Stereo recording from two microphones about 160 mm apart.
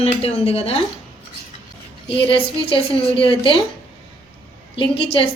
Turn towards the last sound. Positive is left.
turn(degrees=35)  # may be behind; listen again after turning